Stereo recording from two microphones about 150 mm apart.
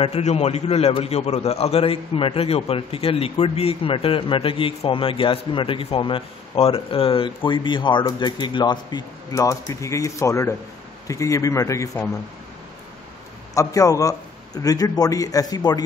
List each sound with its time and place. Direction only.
0.0 s a man's voice: 45° left (ahead or behind); by 12.0 s 20° left (ahead or behind)
13.6 s speech: 25° left (ahead or behind)